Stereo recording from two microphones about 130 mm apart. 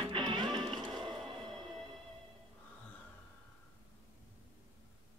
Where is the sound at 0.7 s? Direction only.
Centre (ahead or behind).